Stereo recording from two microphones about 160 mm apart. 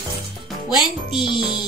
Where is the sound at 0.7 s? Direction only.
30° left (ahead or behind).